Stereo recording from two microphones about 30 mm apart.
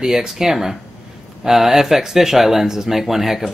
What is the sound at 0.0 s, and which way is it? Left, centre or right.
Speech, centre.